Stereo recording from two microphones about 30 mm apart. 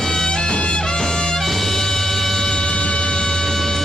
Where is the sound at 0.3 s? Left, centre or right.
Left.